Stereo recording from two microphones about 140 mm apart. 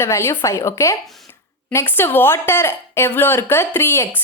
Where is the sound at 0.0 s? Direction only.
20° left (ahead or behind).